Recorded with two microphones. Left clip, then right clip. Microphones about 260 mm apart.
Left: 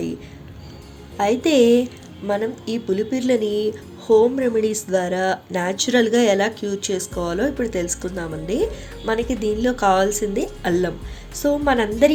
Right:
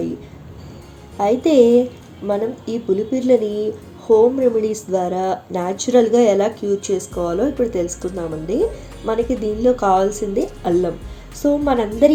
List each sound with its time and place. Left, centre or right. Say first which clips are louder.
1.2 s speech: right 3 dB; left